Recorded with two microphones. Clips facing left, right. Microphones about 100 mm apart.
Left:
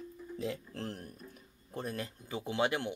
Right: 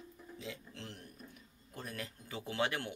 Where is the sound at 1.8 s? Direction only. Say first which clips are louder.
Left 6 dB; 30° left (ahead or behind).